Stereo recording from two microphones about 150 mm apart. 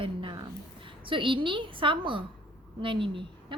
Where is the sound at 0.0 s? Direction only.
30° right (ahead or behind).